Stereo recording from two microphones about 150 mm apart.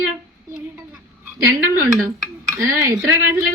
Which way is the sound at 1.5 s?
20° right (ahead or behind).